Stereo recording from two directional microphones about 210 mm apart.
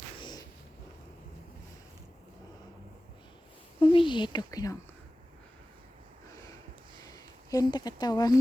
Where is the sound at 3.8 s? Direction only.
25° left (ahead or behind).